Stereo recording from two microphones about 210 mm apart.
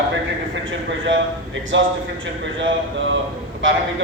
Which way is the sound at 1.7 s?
60° right (ahead or behind).